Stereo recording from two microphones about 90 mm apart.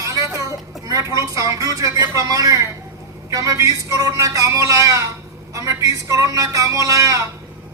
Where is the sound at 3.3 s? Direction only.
40° right (ahead or behind).